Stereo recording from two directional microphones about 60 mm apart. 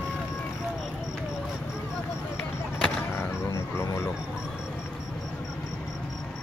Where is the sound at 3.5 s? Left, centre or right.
Left.